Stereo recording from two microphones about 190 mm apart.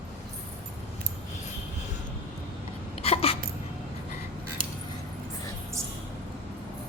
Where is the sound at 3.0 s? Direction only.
30° left (ahead or behind).